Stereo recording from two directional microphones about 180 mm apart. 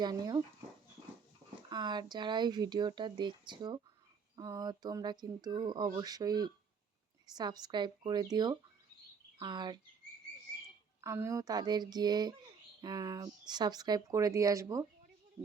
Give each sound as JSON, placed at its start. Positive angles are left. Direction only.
{"t": 0.0, "sound": "speech", "side_deg": -20}
{"t": 1.7, "sound": "speech", "side_deg": -25}
{"t": 11.0, "sound": "speech", "side_deg": -15}